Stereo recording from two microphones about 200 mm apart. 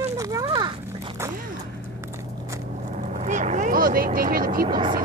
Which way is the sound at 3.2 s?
35° right (ahead or behind).